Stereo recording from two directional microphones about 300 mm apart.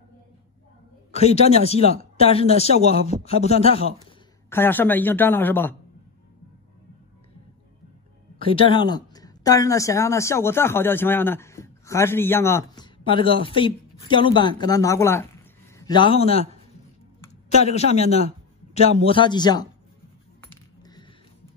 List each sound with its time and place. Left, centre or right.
1.1 s speech: left
4.5 s a woman's voice: centre
8.4 s a woman's voice: centre
17.6 s a woman's voice: left